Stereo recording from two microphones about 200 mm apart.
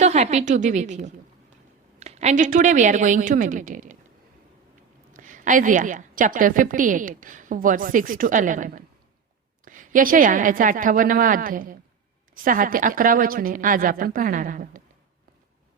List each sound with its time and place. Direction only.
0.0 s a woman's voice: 35° right (ahead or behind)
5.1 s a woman's voice: 40° right (ahead or behind)